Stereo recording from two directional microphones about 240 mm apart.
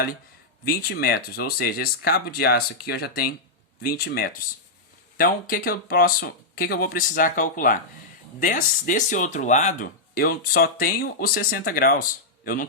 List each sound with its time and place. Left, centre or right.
0.6 s speech: left